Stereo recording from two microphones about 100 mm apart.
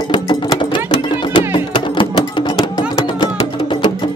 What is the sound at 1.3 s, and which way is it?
Music, 55° left (ahead or behind).